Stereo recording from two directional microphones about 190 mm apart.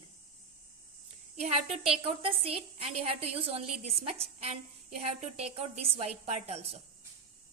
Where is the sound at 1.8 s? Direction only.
30° right (ahead or behind).